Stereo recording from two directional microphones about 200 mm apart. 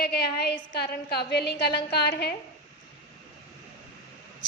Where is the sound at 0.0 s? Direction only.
55° left (ahead or behind).